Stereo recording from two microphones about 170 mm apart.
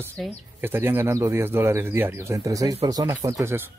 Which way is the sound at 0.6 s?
10° right (ahead or behind).